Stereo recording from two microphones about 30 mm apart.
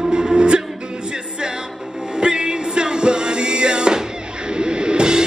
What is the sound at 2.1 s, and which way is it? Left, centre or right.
Music, right.